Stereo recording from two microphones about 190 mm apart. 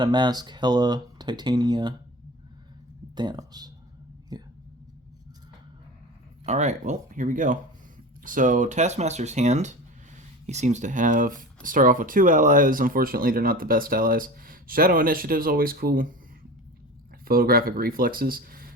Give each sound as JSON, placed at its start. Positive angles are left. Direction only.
{"t": 0.0, "sound": "speech", "side_deg": -25}
{"t": 3.2, "sound": "speech", "side_deg": -20}
{"t": 6.4, "sound": "speech", "side_deg": -35}
{"t": 17.2, "sound": "speech", "side_deg": -50}